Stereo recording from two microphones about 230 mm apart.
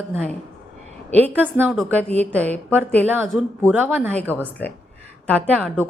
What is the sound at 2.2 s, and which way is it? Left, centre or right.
A woman's voice, centre.